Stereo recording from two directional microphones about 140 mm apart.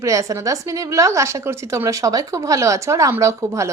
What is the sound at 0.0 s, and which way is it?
Speech, 20° right (ahead or behind).